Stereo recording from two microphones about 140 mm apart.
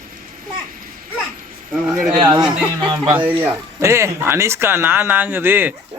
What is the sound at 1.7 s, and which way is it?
Speech, centre (ahead or behind).